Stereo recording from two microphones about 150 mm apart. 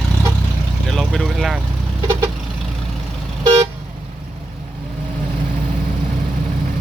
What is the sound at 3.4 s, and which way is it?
Vehicle, 35° right (ahead or behind).